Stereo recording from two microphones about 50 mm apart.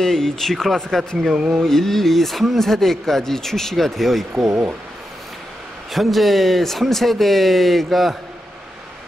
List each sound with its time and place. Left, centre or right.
0.0 s speech: centre
1.3 s a sound: right
1.6 s speech: centre
5.9 s speech: centre